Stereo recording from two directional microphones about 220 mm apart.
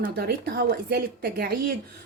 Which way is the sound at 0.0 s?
45° right (ahead or behind).